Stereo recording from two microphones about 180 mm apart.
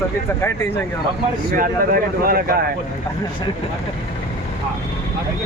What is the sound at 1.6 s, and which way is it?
Speech, 55° right (ahead or behind).